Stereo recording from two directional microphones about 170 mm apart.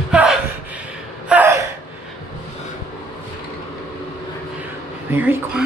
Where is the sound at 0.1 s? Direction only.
5° right (ahead or behind).